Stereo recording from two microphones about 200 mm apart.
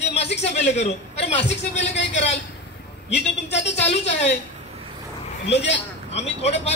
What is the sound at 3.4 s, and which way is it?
Speech, 60° left (ahead or behind).